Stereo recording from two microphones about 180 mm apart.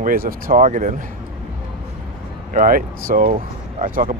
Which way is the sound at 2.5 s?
45° right (ahead or behind).